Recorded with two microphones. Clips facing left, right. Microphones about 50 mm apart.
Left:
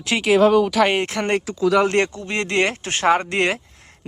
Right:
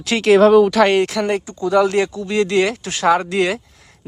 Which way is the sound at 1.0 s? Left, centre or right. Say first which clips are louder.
Right 5 dB; left.